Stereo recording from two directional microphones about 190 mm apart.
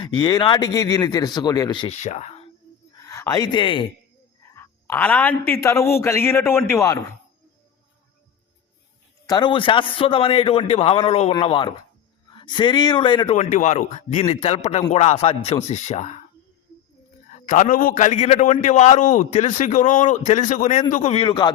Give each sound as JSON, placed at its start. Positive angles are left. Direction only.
{"t": 0.0, "sound": "a man's voice", "side_deg": 25}
{"t": 3.0, "sound": "speech", "side_deg": 15}
{"t": 4.4, "sound": "speech", "side_deg": 15}
{"t": 9.2, "sound": "a man's voice", "side_deg": 25}
{"t": 13.3, "sound": "a man's voice", "side_deg": 40}
{"t": 17.3, "sound": "a man's voice", "side_deg": 45}